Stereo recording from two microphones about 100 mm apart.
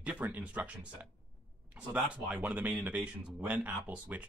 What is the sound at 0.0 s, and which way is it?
Speech, 15° right (ahead or behind).